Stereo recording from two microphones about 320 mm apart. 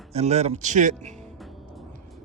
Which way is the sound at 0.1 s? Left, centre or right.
Centre.